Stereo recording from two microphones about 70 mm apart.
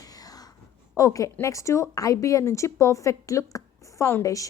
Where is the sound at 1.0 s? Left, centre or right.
Left.